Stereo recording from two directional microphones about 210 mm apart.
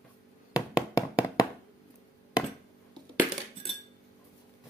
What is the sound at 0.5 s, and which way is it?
Knock, 5° right (ahead or behind).